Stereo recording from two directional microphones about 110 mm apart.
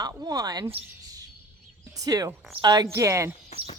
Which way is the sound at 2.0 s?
35° right (ahead or behind).